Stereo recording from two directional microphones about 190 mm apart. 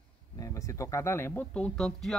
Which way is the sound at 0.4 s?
15° left (ahead or behind).